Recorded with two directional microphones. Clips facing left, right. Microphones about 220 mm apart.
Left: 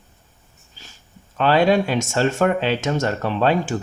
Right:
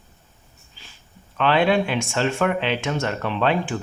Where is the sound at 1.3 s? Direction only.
40° left (ahead or behind).